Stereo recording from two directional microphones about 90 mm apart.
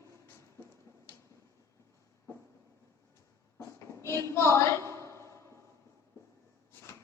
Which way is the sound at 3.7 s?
30° left (ahead or behind).